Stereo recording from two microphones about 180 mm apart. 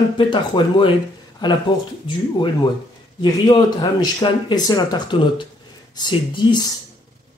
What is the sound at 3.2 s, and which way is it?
Speech, 25° left (ahead or behind).